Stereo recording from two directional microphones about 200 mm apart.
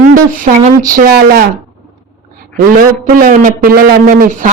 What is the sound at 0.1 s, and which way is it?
Speech, 40° right (ahead or behind).